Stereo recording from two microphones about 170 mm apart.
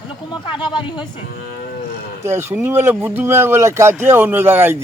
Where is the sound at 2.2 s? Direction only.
15° right (ahead or behind).